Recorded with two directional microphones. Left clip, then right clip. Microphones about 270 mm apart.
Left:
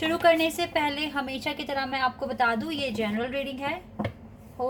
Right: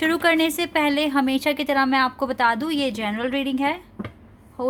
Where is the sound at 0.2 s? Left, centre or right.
Right.